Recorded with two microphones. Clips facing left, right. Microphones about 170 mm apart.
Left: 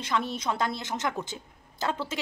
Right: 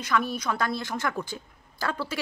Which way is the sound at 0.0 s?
25° left (ahead or behind).